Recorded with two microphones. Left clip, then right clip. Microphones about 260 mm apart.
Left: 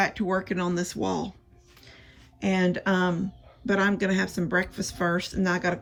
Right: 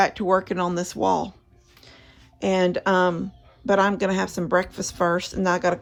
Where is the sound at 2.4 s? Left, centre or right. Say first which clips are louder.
Right 5 dB; centre.